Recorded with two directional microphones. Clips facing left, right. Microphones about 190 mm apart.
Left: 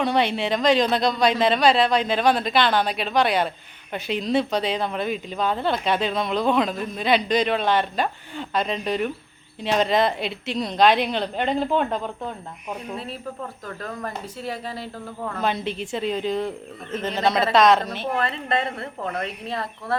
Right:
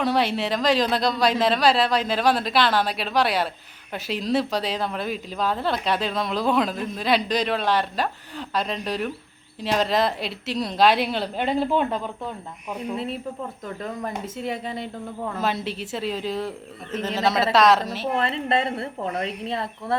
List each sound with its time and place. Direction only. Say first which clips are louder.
0.0 s speech: left 1 dB; centre (ahead or behind)
12.9 s a woman's voice: right 3 dB; 20° right (ahead or behind)
15.4 s speech: left 2 dB; centre (ahead or behind)
18.1 s a woman's voice: right 1 dB; 25° right (ahead or behind)